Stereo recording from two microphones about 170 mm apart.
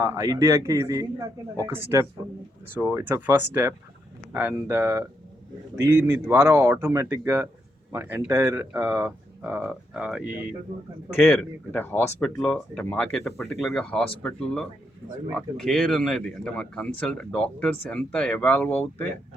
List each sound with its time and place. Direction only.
0.0 s a man's voice: 20° right (ahead or behind)
11.2 s speech: 5° left (ahead or behind)